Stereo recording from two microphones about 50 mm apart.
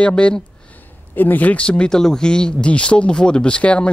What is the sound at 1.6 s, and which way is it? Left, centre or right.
Speech, centre.